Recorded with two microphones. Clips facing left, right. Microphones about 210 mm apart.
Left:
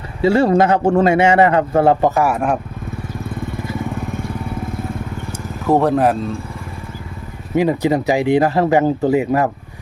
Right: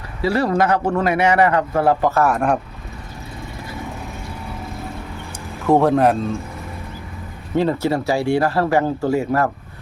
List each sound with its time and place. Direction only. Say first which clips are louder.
0.2 s speech: left 5 dB; 25° left (ahead or behind); by 2.6 s 5° left (ahead or behind)
5.6 s speech: even; centre (ahead or behind)
7.5 s speech: left 3 dB; 15° left (ahead or behind)